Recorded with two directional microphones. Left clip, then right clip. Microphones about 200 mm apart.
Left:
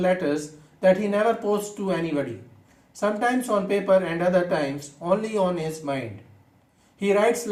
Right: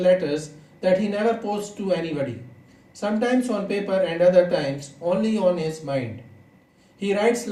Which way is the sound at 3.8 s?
45° left (ahead or behind).